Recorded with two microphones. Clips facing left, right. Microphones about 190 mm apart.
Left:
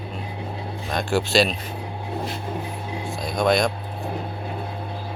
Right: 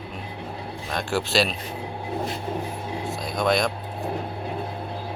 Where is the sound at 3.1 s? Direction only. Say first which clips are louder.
Left 3 dB; centre (ahead or behind).